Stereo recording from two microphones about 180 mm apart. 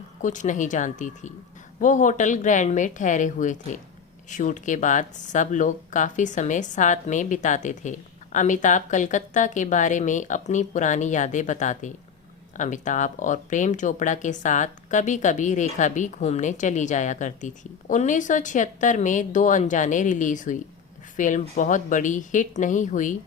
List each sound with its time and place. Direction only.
0.2 s speech: 45° left (ahead or behind)